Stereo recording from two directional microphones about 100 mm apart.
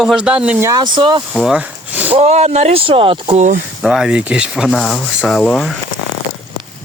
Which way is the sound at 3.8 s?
5° right (ahead or behind).